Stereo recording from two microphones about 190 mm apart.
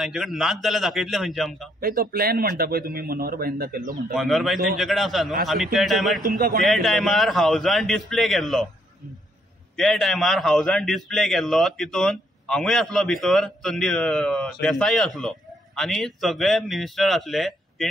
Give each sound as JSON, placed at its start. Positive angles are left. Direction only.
{"t": 0.0, "sound": "a man's voice", "side_deg": 0}
{"t": 1.8, "sound": "a man's voice", "side_deg": -50}
{"t": 4.1, "sound": "a man's voice", "side_deg": 0}
{"t": 6.2, "sound": "a man's voice", "side_deg": -50}
{"t": 6.6, "sound": "a man's voice", "side_deg": 0}
{"t": 9.8, "sound": "a man's voice", "side_deg": 0}